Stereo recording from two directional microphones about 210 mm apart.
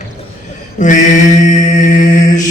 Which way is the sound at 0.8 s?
35° left (ahead or behind).